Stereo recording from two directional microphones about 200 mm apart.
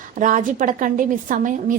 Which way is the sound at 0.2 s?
40° right (ahead or behind).